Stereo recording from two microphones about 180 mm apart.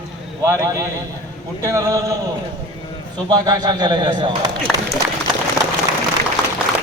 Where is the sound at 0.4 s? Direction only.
15° right (ahead or behind).